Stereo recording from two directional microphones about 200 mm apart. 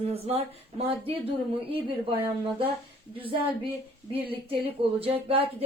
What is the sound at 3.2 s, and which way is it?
Speech, 25° right (ahead or behind).